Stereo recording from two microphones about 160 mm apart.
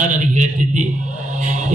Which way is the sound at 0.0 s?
50° right (ahead or behind).